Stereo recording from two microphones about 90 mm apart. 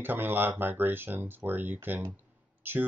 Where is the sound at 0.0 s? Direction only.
20° right (ahead or behind).